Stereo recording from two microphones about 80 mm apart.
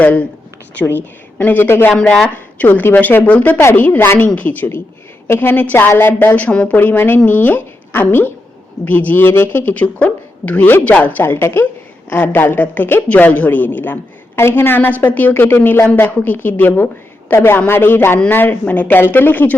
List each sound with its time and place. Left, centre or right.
0.0 s a sound: centre
0.8 s speech: left
1.9 s speech: centre